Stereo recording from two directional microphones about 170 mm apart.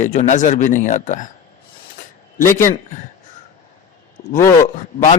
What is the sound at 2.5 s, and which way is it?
Speech, 50° left (ahead or behind).